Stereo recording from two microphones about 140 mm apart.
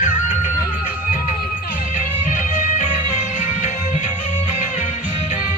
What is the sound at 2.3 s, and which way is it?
Music, 65° left (ahead or behind).